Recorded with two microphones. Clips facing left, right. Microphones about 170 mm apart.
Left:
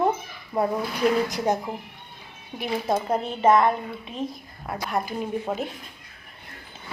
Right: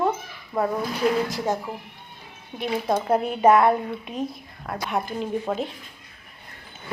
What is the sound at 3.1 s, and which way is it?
Speech, 10° right (ahead or behind).